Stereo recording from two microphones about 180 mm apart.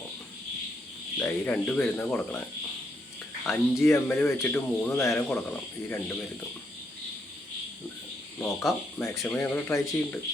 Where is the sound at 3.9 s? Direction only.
10° left (ahead or behind).